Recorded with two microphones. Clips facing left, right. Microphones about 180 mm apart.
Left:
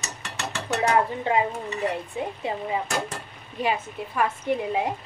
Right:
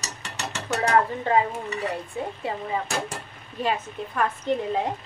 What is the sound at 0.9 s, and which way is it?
Stir, 15° left (ahead or behind).